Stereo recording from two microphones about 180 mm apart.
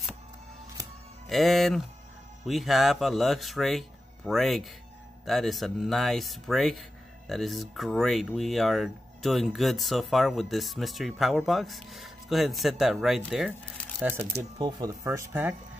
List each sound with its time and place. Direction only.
1.3 s speech: centre (ahead or behind)
14.1 s speech: 25° right (ahead or behind)